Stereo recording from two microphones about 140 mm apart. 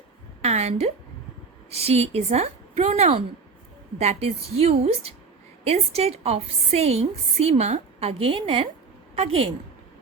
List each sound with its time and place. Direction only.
0.4 s a woman's voice: 50° right (ahead or behind)